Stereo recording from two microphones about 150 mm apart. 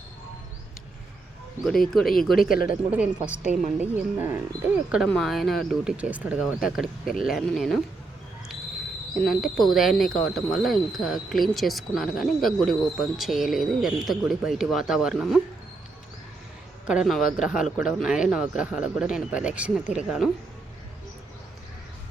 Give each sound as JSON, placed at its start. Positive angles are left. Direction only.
{"t": 1.9, "sound": "speech", "side_deg": 0}
{"t": 2.5, "sound": "speech", "side_deg": 75}
{"t": 2.9, "sound": "a woman's voice", "side_deg": -10}
{"t": 5.0, "sound": "speech", "side_deg": 5}
{"t": 9.2, "sound": "speech", "side_deg": 0}
{"t": 16.8, "sound": "speech", "side_deg": -5}